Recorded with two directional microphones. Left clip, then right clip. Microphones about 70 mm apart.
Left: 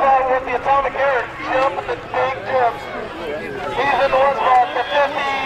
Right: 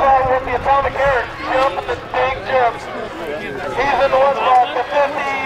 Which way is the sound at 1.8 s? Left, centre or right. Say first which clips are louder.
Right 2 dB; centre.